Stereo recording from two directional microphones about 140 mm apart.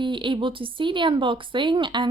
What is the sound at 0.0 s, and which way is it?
Speech, 35° right (ahead or behind).